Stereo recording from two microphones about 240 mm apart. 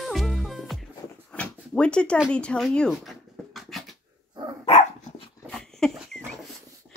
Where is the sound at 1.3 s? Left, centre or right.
Centre.